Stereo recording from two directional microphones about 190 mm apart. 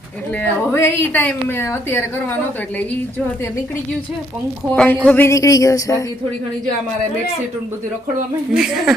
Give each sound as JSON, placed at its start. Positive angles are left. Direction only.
{"t": 0.3, "sound": "a woman's voice", "side_deg": 10}
{"t": 4.7, "sound": "a woman's voice", "side_deg": 10}
{"t": 8.5, "sound": "a woman's voice", "side_deg": 0}